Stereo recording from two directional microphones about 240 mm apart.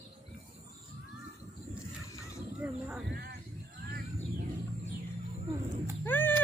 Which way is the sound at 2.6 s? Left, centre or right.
Centre.